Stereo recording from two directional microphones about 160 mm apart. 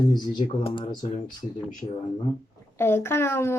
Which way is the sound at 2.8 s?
15° left (ahead or behind).